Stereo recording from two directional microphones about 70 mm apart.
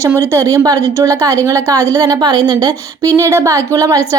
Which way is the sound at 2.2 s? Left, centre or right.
Right.